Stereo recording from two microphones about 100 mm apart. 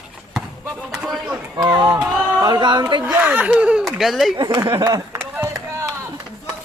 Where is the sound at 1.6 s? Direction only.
45° right (ahead or behind).